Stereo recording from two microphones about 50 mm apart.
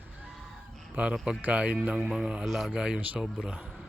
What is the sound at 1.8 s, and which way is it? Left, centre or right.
Speech, right.